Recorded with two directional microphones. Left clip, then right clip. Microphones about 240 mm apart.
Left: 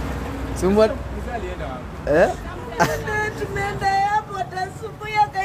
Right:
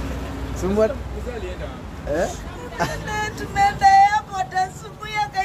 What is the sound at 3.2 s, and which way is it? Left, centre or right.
Speech, right.